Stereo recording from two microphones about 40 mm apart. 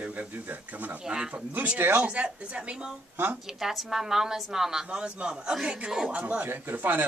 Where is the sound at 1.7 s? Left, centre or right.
Right.